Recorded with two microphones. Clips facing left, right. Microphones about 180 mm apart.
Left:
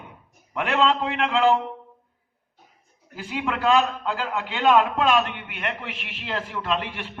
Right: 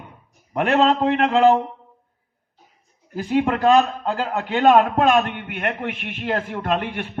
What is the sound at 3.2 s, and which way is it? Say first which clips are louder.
A man's voice: right 8 dB; 45° right (ahead or behind).